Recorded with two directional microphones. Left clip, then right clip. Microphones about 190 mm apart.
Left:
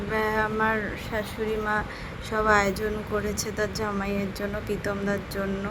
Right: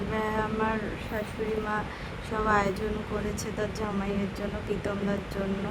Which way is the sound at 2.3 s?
25° left (ahead or behind).